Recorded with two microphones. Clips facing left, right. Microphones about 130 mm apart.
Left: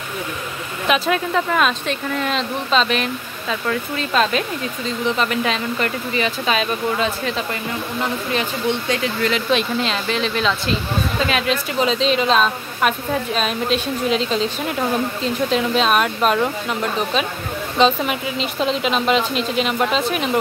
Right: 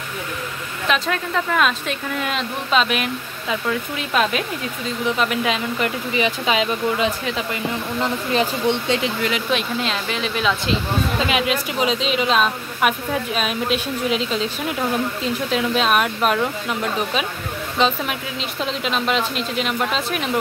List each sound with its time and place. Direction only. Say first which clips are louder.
0.8 s speech: left 3 dB; 5° left (ahead or behind); by 7.4 s 15° right (ahead or behind)
8.3 s speech: right 3 dB; 30° right (ahead or behind)
9.2 s speech: left 3 dB; 5° right (ahead or behind)
17.7 s speech: left 4 dB; centre (ahead or behind)